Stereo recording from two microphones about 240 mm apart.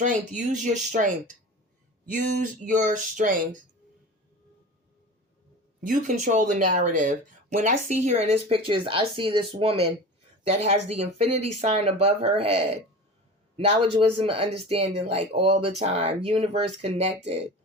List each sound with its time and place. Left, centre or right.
0.0 s speech: right
5.8 s speech: right